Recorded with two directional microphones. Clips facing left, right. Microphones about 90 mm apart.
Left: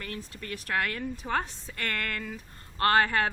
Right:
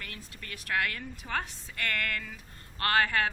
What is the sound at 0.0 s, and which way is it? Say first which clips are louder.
A woman's voice: left 6 dB; 30° left (ahead or behind).